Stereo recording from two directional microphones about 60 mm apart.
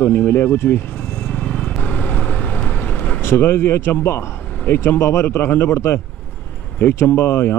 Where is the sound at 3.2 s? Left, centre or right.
Left.